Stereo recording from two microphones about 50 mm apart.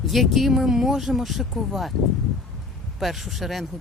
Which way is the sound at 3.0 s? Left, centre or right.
Centre.